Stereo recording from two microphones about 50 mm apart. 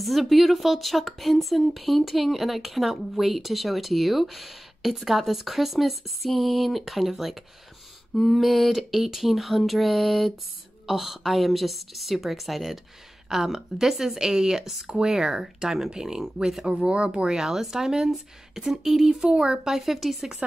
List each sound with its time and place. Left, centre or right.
0.0 s speech: centre
17.3 s speech: centre
19.8 s speech: centre